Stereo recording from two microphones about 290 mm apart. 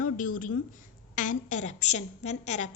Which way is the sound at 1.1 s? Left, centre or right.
Left.